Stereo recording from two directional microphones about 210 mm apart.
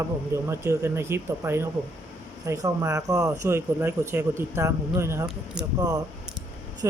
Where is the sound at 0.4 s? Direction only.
15° right (ahead or behind).